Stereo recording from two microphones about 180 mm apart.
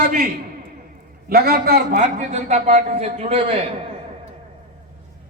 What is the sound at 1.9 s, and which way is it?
A man's voice, 45° right (ahead or behind).